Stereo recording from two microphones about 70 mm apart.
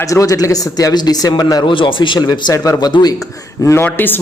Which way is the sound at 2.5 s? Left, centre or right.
Left.